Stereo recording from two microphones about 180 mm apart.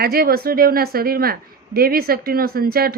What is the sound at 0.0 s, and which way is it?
Speech, 55° right (ahead or behind).